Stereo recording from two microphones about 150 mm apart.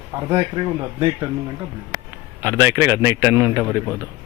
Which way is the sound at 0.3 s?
30° right (ahead or behind).